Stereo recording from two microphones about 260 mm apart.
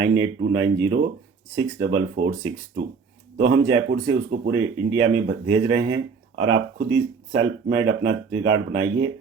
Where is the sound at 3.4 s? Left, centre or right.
Right.